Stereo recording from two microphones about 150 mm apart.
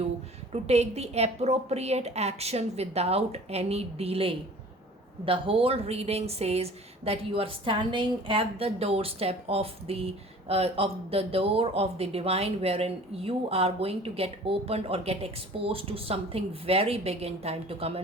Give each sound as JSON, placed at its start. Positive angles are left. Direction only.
{"t": 0.5, "sound": "a woman's voice", "side_deg": -45}